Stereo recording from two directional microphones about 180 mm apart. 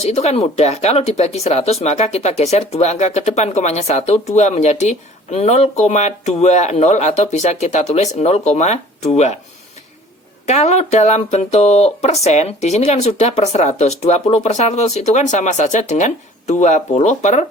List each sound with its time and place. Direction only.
0.0 s speech: 35° left (ahead or behind)
10.4 s speech: 40° left (ahead or behind)